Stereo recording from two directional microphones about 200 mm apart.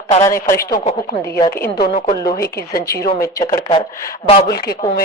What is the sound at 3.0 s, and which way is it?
Speech, 15° left (ahead or behind).